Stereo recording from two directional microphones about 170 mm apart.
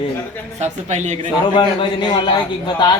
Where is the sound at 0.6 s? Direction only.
45° right (ahead or behind).